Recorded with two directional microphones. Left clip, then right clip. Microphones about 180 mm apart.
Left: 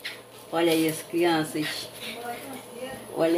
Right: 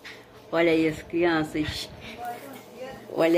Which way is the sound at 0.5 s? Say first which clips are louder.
Right 1 dB; 20° right (ahead or behind).